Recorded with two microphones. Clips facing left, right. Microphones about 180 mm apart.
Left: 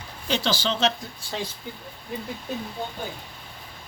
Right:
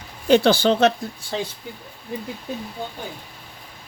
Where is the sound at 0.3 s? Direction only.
55° right (ahead or behind).